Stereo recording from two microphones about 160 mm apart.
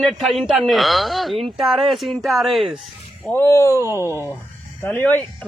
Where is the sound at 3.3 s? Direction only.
15° left (ahead or behind).